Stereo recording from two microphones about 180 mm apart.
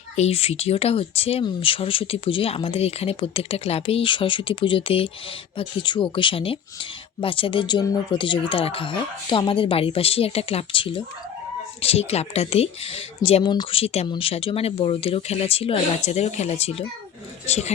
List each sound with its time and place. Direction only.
0.2 s speech: 35° left (ahead or behind)